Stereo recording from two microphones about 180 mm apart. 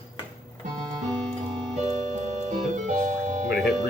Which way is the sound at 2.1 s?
40° right (ahead or behind).